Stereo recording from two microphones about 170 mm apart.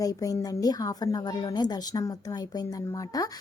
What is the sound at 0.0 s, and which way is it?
A woman's voice, 20° left (ahead or behind).